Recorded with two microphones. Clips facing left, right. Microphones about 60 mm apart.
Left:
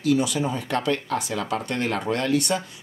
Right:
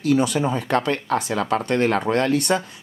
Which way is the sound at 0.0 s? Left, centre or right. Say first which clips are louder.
Right 3 dB; right.